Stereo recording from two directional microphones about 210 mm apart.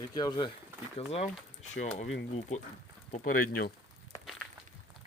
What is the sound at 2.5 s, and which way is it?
Speech, 35° left (ahead or behind).